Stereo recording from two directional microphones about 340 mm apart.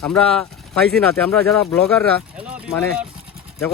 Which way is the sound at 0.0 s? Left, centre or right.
Centre.